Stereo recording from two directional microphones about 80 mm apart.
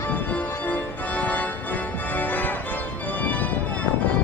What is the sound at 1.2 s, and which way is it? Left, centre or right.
Organ, centre.